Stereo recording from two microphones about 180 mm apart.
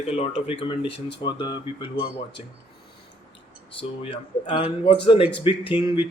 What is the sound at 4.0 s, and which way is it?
Speech, 30° left (ahead or behind).